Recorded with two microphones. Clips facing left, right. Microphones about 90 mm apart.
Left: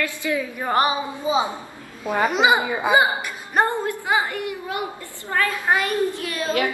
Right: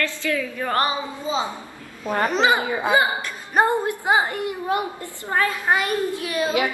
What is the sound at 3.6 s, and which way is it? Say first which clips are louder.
A woman's voice: right 3 dB; 20° right (ahead or behind).